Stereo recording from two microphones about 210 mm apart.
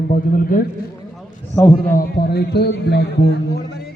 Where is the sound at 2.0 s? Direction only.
50° left (ahead or behind).